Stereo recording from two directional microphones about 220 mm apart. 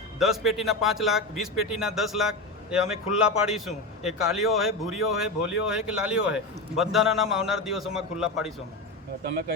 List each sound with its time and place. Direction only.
0.2 s a man's voice: centre (ahead or behind)
9.2 s speech: 45° right (ahead or behind)